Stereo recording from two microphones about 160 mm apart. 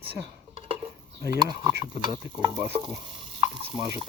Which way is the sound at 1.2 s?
20° right (ahead or behind).